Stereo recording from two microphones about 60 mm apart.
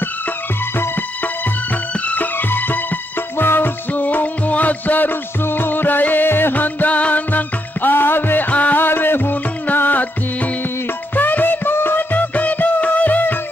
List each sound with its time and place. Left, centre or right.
0.7 s music: left